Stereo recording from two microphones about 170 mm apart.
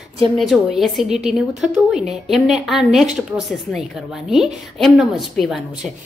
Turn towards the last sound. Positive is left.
turn(degrees=0)  # may be behind; listen again after turning